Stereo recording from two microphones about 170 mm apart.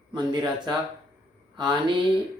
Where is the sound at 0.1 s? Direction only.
25° right (ahead or behind).